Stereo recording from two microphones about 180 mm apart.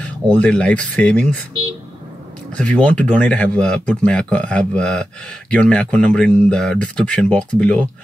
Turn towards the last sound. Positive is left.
turn(degrees=5)  # may be behind; listen again after turning